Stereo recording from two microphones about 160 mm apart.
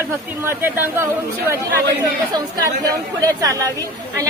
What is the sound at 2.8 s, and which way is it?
Speech, 20° right (ahead or behind).